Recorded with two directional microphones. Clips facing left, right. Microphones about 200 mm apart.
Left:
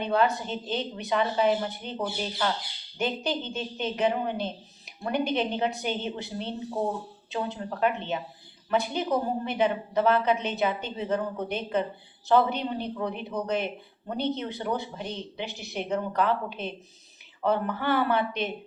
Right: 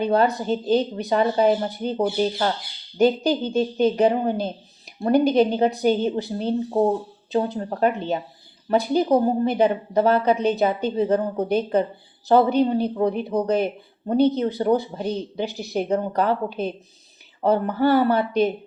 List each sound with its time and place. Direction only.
0.0 s speech: 35° right (ahead or behind)